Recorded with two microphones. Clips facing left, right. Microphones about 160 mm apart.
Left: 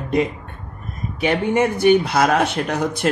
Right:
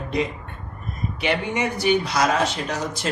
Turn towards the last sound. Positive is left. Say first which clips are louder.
# left 6 dB
turn(degrees=60)  # may be behind; listen again after turning